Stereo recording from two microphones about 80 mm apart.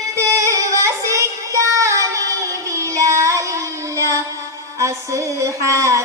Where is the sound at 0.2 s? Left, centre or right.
Right.